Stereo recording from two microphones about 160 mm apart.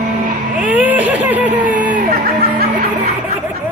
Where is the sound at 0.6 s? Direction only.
10° right (ahead or behind).